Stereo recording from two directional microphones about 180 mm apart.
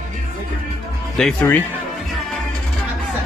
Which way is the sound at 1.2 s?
5° left (ahead or behind).